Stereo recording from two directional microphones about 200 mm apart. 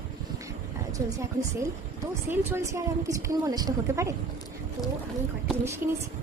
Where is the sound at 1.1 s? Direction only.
15° right (ahead or behind).